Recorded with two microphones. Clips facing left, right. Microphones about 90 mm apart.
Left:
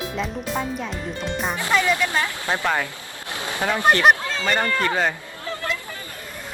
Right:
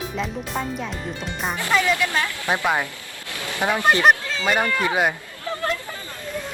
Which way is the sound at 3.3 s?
20° left (ahead or behind).